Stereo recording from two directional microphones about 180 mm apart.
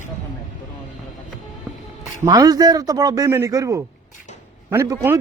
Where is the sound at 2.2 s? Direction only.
20° right (ahead or behind).